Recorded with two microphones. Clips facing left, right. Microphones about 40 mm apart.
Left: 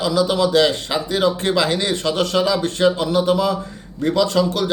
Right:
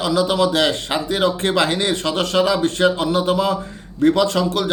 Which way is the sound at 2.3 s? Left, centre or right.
Right.